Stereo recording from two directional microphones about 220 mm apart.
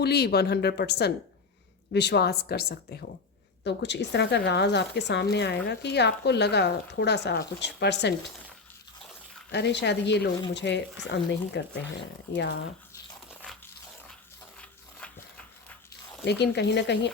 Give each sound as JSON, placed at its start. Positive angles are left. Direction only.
{"t": 0.0, "sound": "speech", "side_deg": 45}
{"t": 9.5, "sound": "speech", "side_deg": 50}
{"t": 14.6, "sound": "dog", "side_deg": 5}
{"t": 16.2, "sound": "speech", "side_deg": 50}